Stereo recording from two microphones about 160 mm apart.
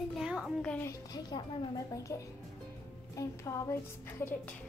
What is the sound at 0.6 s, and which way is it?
Speech, 10° left (ahead or behind).